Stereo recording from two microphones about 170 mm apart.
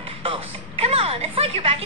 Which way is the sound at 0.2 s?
30° right (ahead or behind).